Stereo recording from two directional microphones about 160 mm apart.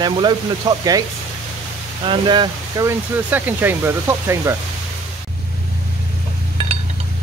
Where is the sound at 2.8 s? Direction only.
10° right (ahead or behind).